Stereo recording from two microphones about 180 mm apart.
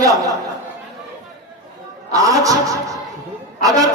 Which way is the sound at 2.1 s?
20° right (ahead or behind).